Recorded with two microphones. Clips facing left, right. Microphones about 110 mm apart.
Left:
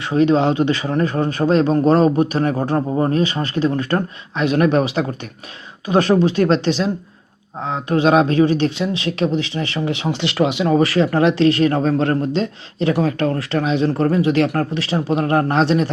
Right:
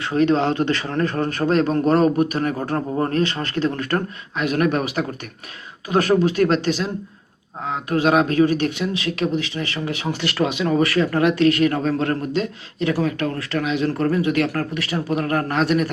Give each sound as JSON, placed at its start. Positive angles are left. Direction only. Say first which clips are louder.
{"t": 0.0, "sound": "a man's voice", "louder": "left 3 dB", "side_deg": 20}
{"t": 2.6, "sound": "a man's voice", "louder": "left 4 dB", "side_deg": 15}